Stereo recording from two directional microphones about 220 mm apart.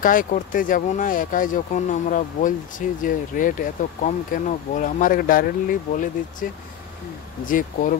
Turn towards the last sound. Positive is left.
turn(degrees=35)  # may be behind; listen again after turning